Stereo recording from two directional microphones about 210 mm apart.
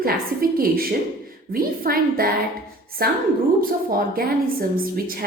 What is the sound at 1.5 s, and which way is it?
Speech, 45° right (ahead or behind).